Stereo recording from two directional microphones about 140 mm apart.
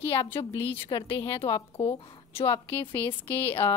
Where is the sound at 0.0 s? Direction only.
40° left (ahead or behind).